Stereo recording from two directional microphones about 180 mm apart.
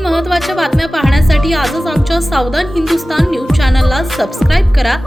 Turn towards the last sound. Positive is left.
turn(degrees=0)  # may be behind; listen again after turning